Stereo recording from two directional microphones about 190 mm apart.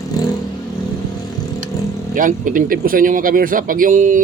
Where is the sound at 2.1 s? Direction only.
45° right (ahead or behind).